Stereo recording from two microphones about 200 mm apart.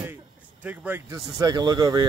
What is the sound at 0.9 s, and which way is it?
Speech, 20° right (ahead or behind).